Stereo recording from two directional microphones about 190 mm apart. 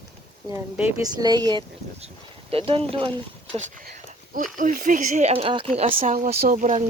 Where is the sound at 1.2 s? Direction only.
20° right (ahead or behind).